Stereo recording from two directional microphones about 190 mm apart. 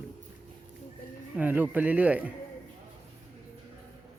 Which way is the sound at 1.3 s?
10° right (ahead or behind).